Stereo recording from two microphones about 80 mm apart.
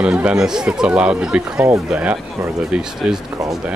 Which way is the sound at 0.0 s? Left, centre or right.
Centre.